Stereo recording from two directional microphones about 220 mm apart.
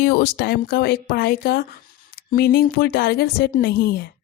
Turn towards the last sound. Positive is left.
turn(degrees=40)  # may be behind; listen again after turning